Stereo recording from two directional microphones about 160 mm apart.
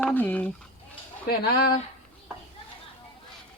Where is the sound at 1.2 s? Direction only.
75° left (ahead or behind).